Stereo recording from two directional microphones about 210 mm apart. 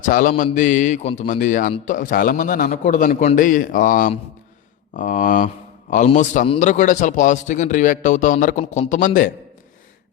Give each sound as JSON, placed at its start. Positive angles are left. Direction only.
{"t": 0.1, "sound": "a man's voice", "side_deg": 40}